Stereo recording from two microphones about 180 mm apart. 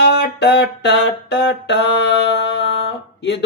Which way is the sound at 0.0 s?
70° left (ahead or behind).